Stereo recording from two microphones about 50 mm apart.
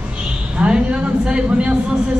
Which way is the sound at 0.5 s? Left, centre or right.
Centre.